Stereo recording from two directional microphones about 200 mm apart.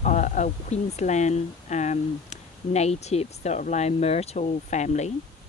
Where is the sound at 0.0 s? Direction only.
40° left (ahead or behind).